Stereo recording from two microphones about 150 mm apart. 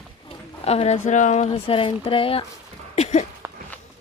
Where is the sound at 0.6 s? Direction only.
45° left (ahead or behind).